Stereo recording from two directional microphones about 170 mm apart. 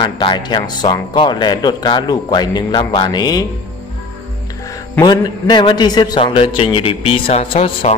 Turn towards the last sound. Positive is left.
turn(degrees=35)  # may be behind; listen again after turning